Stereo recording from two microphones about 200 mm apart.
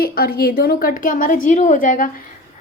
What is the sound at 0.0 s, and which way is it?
A woman's voice, 50° left (ahead or behind).